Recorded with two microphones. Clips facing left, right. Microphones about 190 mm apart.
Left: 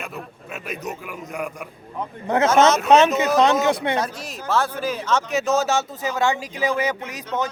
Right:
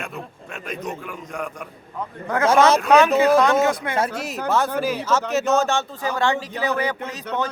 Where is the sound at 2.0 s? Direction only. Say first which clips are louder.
Left 3 dB; 25° left (ahead or behind).